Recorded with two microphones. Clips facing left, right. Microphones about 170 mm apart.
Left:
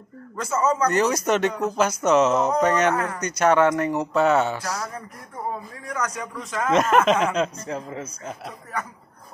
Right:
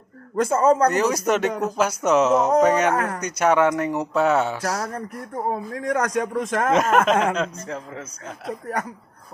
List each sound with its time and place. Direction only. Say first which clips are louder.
0.4 s a man's voice: right 5 dB; 55° right (ahead or behind)
0.9 s speech: even; 5° right (ahead or behind)
4.6 s a man's voice: right 4 dB; 55° right (ahead or behind)
5.5 s a man's voice: right 10 dB; 75° right (ahead or behind); by 6.7 s 50° right (ahead or behind)
6.7 s speech: left 1 dB; 5° right (ahead or behind)
7.3 s a man's voice: left 2 dB; 10° left (ahead or behind)